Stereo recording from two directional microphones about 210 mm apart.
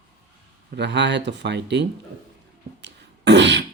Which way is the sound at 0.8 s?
55° right (ahead or behind).